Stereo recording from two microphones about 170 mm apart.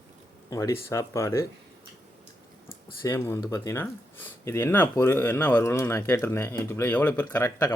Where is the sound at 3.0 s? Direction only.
15° left (ahead or behind).